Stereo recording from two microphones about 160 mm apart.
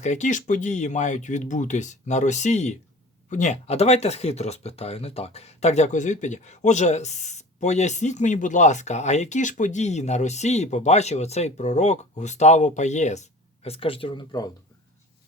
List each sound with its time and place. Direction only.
0.0 s speech: 50° left (ahead or behind); by 14.5 s 25° left (ahead or behind)